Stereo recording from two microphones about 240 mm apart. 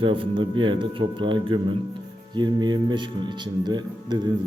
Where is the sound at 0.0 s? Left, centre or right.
Right.